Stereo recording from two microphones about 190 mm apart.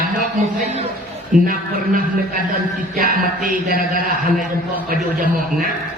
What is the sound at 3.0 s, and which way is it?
A man's voice, 50° right (ahead or behind).